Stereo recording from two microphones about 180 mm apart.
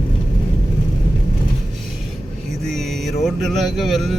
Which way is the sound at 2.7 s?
Centre (ahead or behind).